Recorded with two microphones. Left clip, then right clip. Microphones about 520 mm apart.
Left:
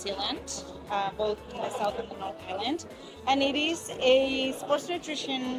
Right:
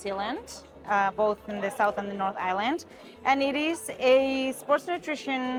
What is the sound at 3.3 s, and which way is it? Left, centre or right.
A woman's voice, right.